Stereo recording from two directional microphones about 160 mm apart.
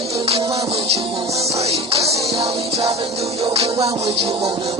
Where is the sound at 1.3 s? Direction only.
20° right (ahead or behind).